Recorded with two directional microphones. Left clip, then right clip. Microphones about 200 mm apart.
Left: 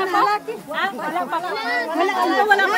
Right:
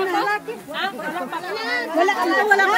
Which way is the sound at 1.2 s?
5° left (ahead or behind).